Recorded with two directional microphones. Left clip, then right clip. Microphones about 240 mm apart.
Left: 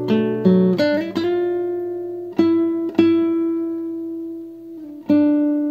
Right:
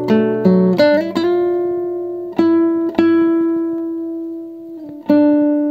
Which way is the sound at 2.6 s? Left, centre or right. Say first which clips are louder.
Right 3 dB; right.